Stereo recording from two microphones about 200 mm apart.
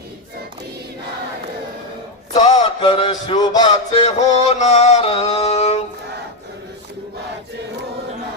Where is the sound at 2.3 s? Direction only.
30° left (ahead or behind).